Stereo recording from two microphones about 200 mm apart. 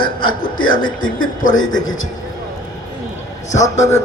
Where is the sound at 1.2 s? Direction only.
40° left (ahead or behind).